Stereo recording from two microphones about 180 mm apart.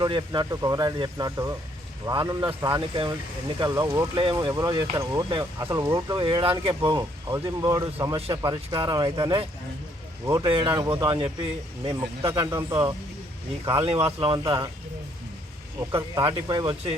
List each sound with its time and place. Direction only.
0.0 s speech: 25° right (ahead or behind)
2.9 s speech: 30° right (ahead or behind)
6.9 s speech: 15° right (ahead or behind)
13.7 s speech: 30° right (ahead or behind)
15.8 s speech: 15° right (ahead or behind)